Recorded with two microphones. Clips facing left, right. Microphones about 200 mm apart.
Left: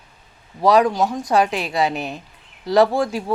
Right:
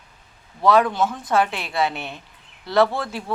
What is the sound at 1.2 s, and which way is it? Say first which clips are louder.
Speech: left 3 dB; 15° left (ahead or behind).